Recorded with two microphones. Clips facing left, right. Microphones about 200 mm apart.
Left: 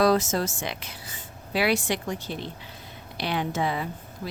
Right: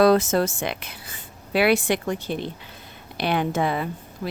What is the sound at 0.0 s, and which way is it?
Speech, 60° right (ahead or behind).